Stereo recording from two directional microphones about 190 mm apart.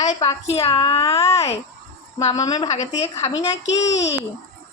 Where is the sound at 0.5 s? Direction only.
30° left (ahead or behind).